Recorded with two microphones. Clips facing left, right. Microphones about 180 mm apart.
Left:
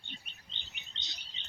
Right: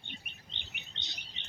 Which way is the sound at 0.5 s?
60° right (ahead or behind).